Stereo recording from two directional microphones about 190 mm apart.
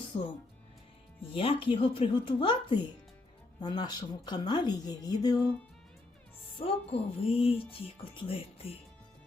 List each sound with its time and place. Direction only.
0.1 s speech: 25° left (ahead or behind)
6.6 s speech: 30° left (ahead or behind)